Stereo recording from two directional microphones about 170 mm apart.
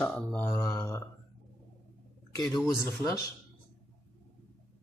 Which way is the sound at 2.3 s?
25° left (ahead or behind).